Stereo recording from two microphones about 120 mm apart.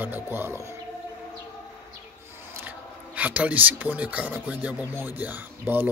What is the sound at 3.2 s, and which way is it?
Speech, 10° right (ahead or behind).